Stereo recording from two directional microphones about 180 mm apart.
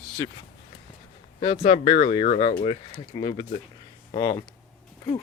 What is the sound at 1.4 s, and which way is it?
Speech, 35° left (ahead or behind).